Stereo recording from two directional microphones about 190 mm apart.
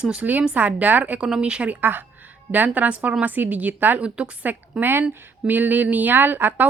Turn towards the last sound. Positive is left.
turn(degrees=-10)  # may be behind; listen again after turning